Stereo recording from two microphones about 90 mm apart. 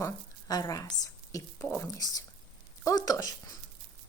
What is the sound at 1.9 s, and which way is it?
Speech, 40° left (ahead or behind).